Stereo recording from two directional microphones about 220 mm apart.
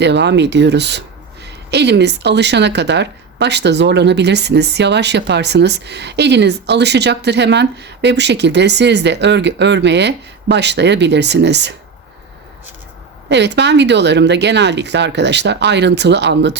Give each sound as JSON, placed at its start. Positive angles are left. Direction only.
{"t": 0.0, "sound": "speech", "side_deg": -50}
{"t": 13.2, "sound": "speech", "side_deg": -50}